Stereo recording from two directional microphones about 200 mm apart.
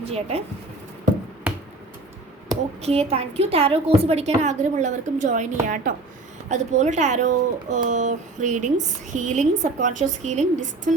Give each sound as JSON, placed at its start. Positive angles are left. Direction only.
{"t": 0.0, "sound": "speech", "side_deg": -30}
{"t": 2.8, "sound": "a woman's voice", "side_deg": -30}